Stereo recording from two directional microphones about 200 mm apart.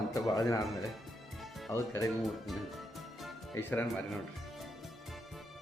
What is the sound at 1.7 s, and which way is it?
Speech, 15° left (ahead or behind).